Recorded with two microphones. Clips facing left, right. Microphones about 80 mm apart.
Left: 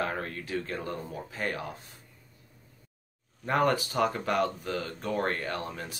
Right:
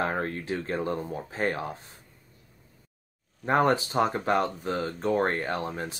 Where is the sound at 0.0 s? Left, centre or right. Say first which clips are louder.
Right 4 dB; right.